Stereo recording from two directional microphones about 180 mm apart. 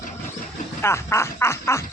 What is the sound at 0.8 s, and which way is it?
Gargling, 15° left (ahead or behind).